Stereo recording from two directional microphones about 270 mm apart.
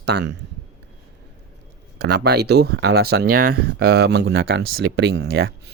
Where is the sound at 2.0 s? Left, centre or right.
Right.